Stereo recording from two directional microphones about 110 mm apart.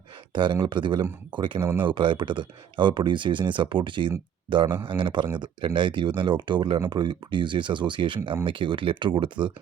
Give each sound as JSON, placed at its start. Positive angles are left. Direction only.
{"t": 0.3, "sound": "speech", "side_deg": -45}